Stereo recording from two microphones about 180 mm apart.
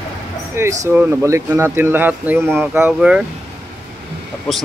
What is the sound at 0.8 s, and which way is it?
Speech, 15° right (ahead or behind).